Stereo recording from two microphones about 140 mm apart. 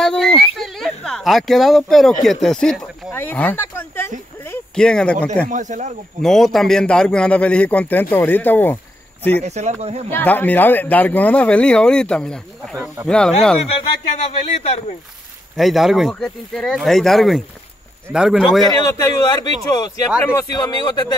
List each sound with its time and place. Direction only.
0.0 s a sound: 5° left (ahead or behind)
2.2 s speech: 5° left (ahead or behind)
3.1 s a sound: 15° left (ahead or behind)
4.7 s speech: 5° left (ahead or behind)
5.5 s speech: 60° right (ahead or behind)
6.2 s speech: centre (ahead or behind)
9.4 s speech: 55° right (ahead or behind)
10.1 s speech: 10° left (ahead or behind)
13.7 s speech: 45° left (ahead or behind)
15.5 s speech: centre (ahead or behind)
18.7 s speech: 25° left (ahead or behind)